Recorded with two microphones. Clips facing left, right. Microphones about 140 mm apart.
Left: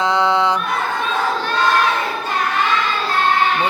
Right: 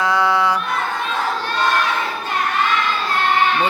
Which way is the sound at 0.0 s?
20° left (ahead or behind).